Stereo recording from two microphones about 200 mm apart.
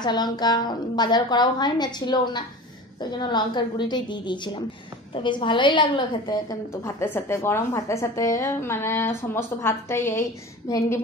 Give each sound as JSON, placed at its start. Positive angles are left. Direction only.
{"t": 0.0, "sound": "a woman's voice", "side_deg": 20}